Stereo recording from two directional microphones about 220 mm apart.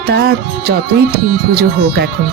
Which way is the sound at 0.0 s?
50° right (ahead or behind).